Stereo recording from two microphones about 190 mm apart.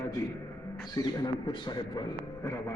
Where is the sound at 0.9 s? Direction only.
25° left (ahead or behind).